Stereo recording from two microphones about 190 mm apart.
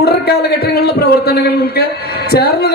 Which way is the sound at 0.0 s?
55° left (ahead or behind).